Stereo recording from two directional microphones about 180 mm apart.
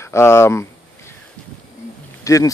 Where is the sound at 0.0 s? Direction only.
15° left (ahead or behind).